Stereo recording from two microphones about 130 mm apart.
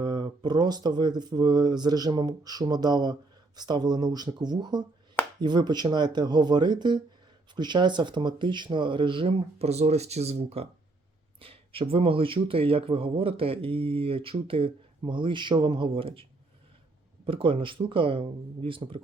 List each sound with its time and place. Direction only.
0.0 s speech: 35° right (ahead or behind)
17.2 s speech: 40° right (ahead or behind)